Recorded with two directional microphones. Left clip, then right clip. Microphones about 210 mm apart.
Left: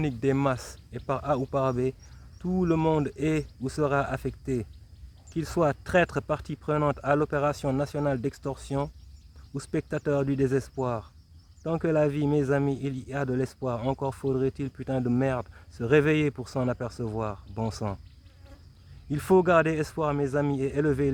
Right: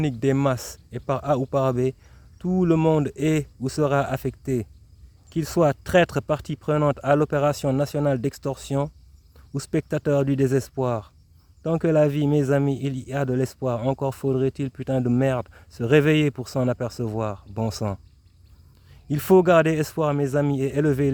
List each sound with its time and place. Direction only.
0.0 s speech: 45° right (ahead or behind)
19.0 s speech: 45° right (ahead or behind)